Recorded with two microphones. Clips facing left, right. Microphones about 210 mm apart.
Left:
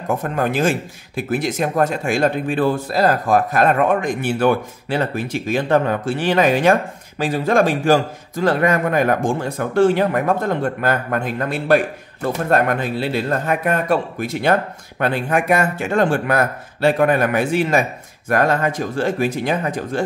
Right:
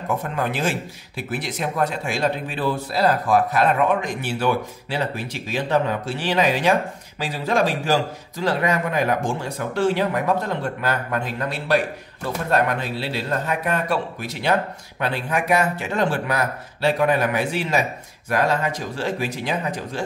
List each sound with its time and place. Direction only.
0.1 s speech: 45° left (ahead or behind)